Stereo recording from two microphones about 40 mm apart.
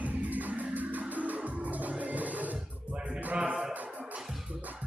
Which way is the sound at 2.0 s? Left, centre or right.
Right.